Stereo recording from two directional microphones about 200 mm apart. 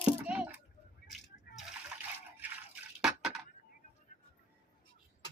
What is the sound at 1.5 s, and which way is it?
Splash, 50° left (ahead or behind).